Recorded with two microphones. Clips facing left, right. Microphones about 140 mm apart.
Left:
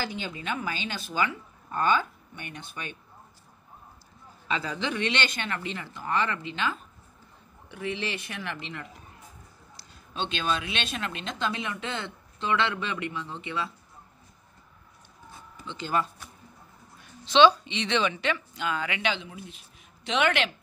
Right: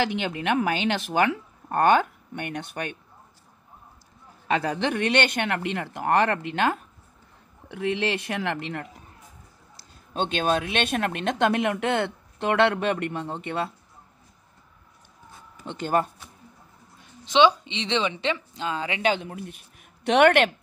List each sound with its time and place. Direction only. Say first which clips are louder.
0.0 s speech: right 8 dB; 70° right (ahead or behind)
4.5 s speech: right 6 dB; 60° right (ahead or behind)
7.6 s speech: right 7 dB; 85° right; by 8.8 s 60° right (ahead or behind)
10.1 s speech: right 6 dB; 50° right (ahead or behind)
15.6 s speech: right 4 dB; 55° right (ahead or behind)
17.2 s a woman's voice: even; 15° right (ahead or behind); by 19.1 s 30° right (ahead or behind)
19.1 s speech: right 6 dB; 55° right (ahead or behind)